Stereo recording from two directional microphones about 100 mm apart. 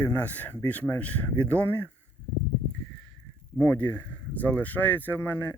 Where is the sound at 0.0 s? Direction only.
15° left (ahead or behind).